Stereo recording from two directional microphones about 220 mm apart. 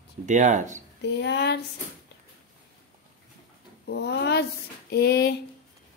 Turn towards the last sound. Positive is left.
turn(degrees=50)  # may be behind; listen again after turning